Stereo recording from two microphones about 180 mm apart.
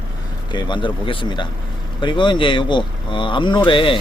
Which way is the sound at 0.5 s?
25° left (ahead or behind).